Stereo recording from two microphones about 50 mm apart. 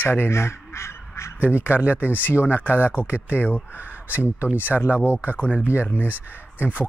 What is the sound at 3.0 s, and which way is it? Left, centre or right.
Speech, left.